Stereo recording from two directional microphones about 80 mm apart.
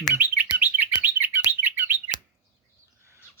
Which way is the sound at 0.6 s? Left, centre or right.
Right.